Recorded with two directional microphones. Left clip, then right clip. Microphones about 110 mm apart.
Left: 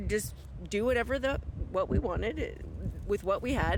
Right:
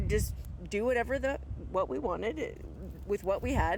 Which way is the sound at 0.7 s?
20° left (ahead or behind).